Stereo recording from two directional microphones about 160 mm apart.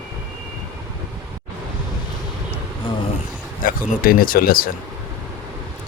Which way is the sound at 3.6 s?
60° left (ahead or behind).